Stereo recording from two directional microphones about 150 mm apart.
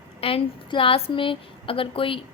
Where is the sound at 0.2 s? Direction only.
40° left (ahead or behind).